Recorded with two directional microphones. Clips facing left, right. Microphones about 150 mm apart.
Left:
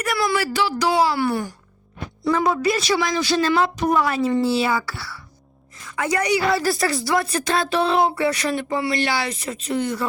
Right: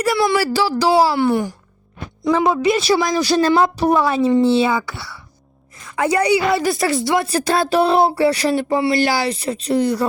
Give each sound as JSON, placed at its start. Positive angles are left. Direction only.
{"t": 0.0, "sound": "speech", "side_deg": -30}
{"t": 1.2, "sound": "a woman's voice", "side_deg": -20}
{"t": 2.8, "sound": "a woman's voice", "side_deg": -40}